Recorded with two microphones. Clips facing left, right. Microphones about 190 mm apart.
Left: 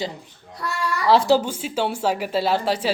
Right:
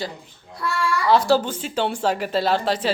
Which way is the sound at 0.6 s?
40° left (ahead or behind).